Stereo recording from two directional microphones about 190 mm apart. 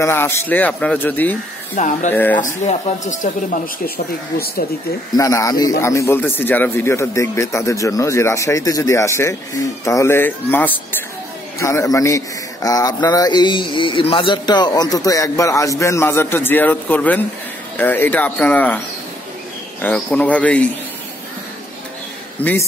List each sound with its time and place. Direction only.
0.0 s speech: 10° left (ahead or behind)
1.8 s speech: 40° left (ahead or behind)
2.1 s speech: 10° left (ahead or behind)
2.4 s speech: 40° left (ahead or behind)
5.1 s speech: 15° left (ahead or behind)
19.8 s speech: 10° left (ahead or behind)
22.4 s speech: 10° left (ahead or behind)